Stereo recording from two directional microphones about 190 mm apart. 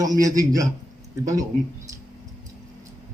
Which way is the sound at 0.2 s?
20° right (ahead or behind).